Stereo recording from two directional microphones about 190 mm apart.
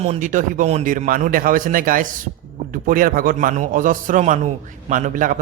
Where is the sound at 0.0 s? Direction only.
40° right (ahead or behind).